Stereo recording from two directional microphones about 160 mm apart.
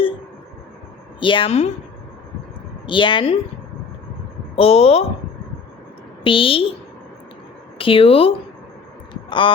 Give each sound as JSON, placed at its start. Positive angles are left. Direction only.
{"t": 1.2, "sound": "a woman's voice", "side_deg": 30}
{"t": 2.8, "sound": "a woman's voice", "side_deg": 30}
{"t": 4.5, "sound": "a woman's voice", "side_deg": 40}
{"t": 6.2, "sound": "a woman's voice", "side_deg": 35}
{"t": 7.8, "sound": "a woman's voice", "side_deg": 35}